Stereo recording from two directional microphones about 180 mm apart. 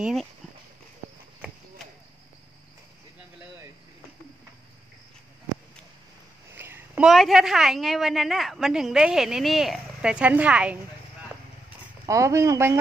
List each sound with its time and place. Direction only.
0.0 s a woman's voice: centre (ahead or behind)
6.5 s a woman's voice: 10° right (ahead or behind)
12.1 s speech: 15° right (ahead or behind)